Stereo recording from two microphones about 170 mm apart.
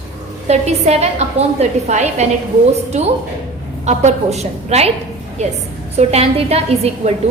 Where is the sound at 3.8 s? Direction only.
40° right (ahead or behind).